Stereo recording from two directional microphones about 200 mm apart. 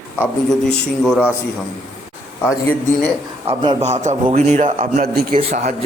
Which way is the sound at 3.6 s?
25° right (ahead or behind).